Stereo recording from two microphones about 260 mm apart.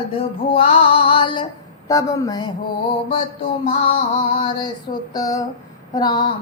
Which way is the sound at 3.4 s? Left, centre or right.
Left.